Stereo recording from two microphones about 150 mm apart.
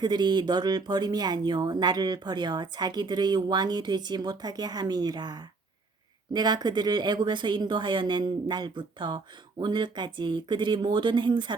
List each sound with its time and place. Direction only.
0.0 s speech: 30° right (ahead or behind)